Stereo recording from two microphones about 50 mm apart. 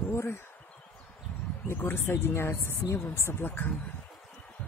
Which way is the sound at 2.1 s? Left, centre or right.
Left.